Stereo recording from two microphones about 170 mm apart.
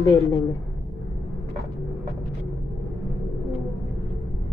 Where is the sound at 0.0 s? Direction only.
20° left (ahead or behind).